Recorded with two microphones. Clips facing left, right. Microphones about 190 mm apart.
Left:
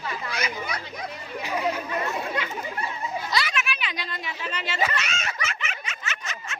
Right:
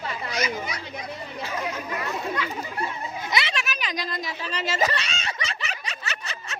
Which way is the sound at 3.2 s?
20° right (ahead or behind).